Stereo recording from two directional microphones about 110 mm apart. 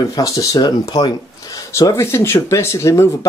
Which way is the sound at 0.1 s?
30° left (ahead or behind).